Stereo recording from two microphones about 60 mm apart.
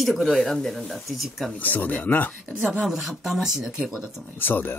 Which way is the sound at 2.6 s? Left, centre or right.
Centre.